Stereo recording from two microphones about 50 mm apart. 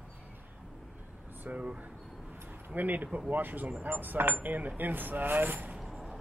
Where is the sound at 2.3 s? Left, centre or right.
Right.